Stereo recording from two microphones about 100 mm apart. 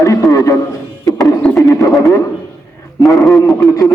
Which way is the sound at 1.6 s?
30° left (ahead or behind).